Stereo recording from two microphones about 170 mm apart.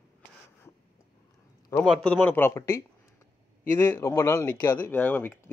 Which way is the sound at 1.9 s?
5° left (ahead or behind).